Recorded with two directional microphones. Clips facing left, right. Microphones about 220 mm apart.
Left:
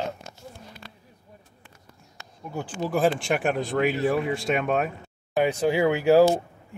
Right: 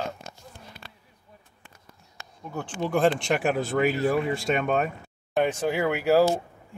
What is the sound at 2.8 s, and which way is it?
Speech, 5° left (ahead or behind).